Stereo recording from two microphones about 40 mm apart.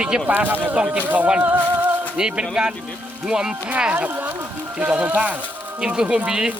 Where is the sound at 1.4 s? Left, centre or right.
Right.